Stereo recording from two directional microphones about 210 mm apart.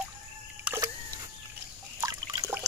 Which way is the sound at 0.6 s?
10° right (ahead or behind).